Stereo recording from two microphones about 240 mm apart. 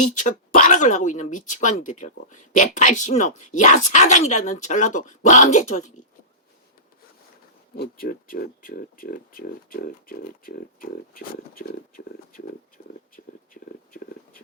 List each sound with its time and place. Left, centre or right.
0.1 s speech: left
7.8 s speech: left
12.7 s a sound: left